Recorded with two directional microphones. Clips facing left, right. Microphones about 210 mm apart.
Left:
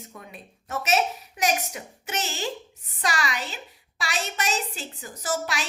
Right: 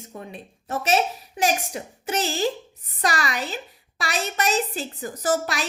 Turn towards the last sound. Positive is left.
turn(degrees=-45)  # may be behind; listen again after turning